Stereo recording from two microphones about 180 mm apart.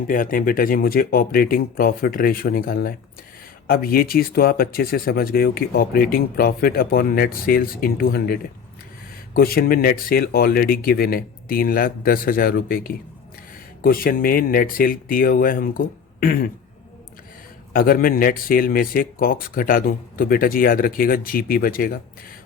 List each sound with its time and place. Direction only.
0.1 s speech: 50° left (ahead or behind)
17.7 s speech: 55° left (ahead or behind)